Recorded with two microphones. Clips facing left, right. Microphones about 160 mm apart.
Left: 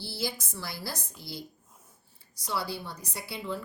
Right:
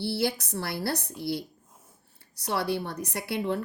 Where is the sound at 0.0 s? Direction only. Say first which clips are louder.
Right 7 dB; 60° right (ahead or behind).